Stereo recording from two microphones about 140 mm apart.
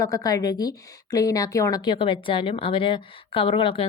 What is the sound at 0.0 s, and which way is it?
A woman's voice, 25° left (ahead or behind).